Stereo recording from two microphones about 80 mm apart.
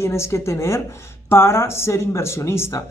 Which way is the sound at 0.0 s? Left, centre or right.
Left.